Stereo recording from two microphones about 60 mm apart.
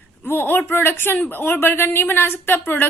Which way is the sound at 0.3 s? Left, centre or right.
Left.